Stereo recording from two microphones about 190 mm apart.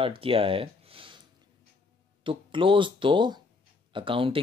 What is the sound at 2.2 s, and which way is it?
Speech, 25° right (ahead or behind).